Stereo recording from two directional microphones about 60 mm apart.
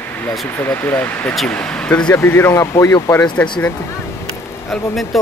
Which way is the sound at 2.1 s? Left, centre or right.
Left.